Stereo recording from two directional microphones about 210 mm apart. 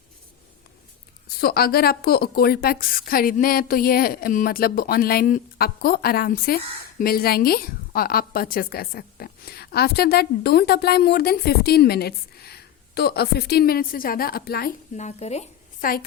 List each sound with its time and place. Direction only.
1.4 s a woman's voice: 45° left (ahead or behind)
14.9 s speech: 30° left (ahead or behind)